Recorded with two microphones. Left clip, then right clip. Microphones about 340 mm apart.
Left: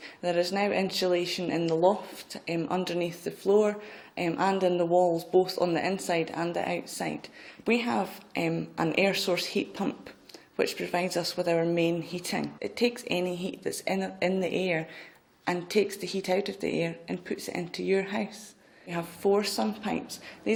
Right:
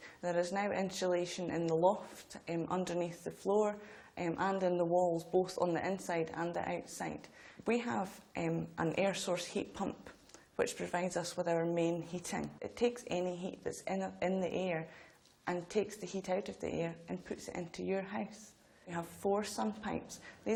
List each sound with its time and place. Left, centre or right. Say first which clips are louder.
0.2 s speech: left 8 dB; right